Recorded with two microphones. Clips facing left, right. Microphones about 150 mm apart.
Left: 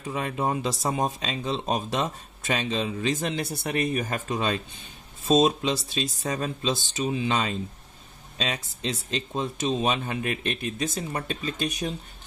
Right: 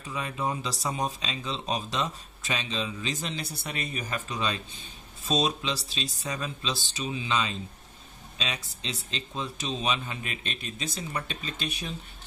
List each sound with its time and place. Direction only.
0.0 s speech: 50° left (ahead or behind)
8.8 s speech: 45° left (ahead or behind)